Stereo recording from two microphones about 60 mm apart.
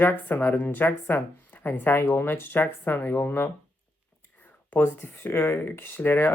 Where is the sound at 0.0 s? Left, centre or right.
Left.